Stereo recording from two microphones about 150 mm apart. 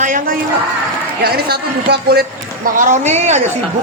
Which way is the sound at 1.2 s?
90° right.